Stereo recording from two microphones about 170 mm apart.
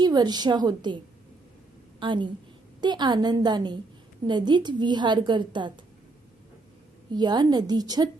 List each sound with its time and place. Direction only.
0.0 s a woman's voice: 25° right (ahead or behind)
2.0 s a woman's voice: 30° right (ahead or behind)
7.1 s a woman's voice: 25° right (ahead or behind)